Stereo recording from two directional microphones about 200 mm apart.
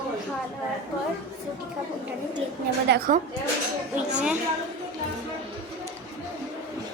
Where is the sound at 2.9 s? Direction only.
45° right (ahead or behind).